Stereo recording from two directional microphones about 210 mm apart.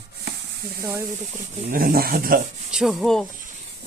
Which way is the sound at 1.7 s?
45° right (ahead or behind).